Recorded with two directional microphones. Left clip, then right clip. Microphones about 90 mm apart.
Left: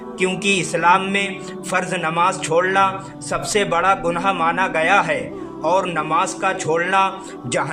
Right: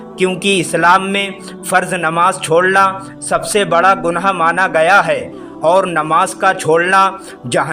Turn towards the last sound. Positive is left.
turn(degrees=-60)  # may be behind; listen again after turning